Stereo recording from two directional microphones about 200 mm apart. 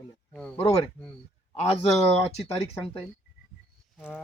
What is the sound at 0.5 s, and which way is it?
A man's voice, 30° left (ahead or behind).